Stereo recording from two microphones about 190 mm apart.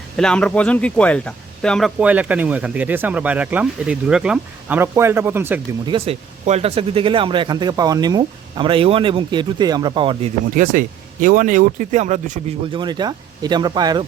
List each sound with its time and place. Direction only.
0.2 s speech: 5° left (ahead or behind)
2.0 s speech: 5° right (ahead or behind)
5.8 s speech: 25° right (ahead or behind)
10.5 s speech: 45° right (ahead or behind)
12.7 s speech: 25° right (ahead or behind)